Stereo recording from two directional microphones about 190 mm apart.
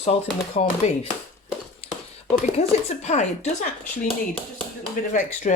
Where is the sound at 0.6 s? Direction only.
40° left (ahead or behind).